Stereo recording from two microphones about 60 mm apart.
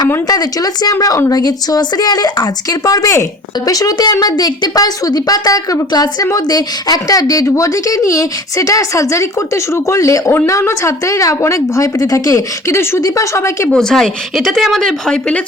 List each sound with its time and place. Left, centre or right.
0.3 s a woman's voice: left
10.3 s a woman's voice: left
13.7 s speech: centre